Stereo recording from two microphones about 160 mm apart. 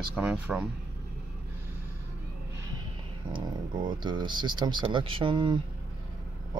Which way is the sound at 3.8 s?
30° right (ahead or behind).